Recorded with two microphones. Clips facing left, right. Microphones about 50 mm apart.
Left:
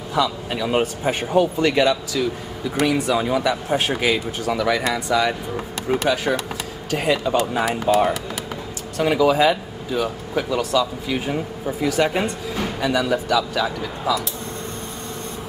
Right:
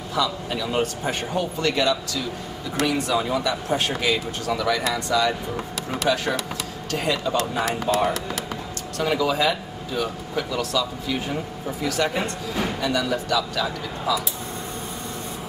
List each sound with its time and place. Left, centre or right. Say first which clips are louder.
0.1 s speech: left 3 dB; centre